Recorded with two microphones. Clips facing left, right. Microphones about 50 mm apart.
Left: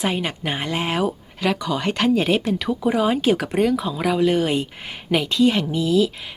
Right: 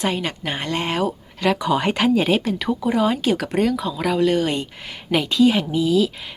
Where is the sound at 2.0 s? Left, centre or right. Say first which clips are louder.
Left 3 dB; centre.